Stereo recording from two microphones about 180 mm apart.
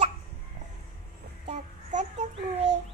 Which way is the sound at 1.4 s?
40° right (ahead or behind).